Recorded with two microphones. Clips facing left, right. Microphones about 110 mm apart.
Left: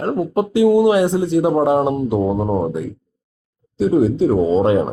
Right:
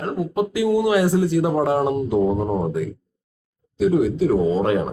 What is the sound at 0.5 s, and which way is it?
Speech, 25° left (ahead or behind).